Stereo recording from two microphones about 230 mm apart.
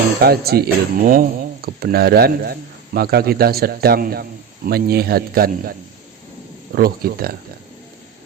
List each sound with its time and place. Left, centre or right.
0.2 s speech: right
6.7 s speech: right